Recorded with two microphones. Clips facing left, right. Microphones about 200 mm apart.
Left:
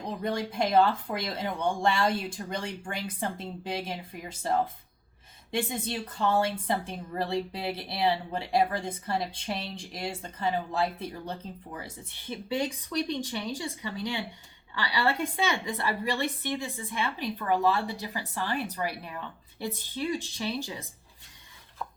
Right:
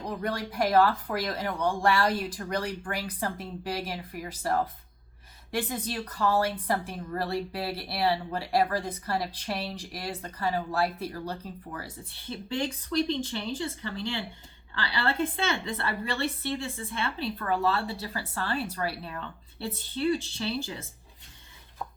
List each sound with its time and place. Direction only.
0.3 s a woman's voice: 25° left (ahead or behind)
13.1 s a woman's voice: 15° left (ahead or behind)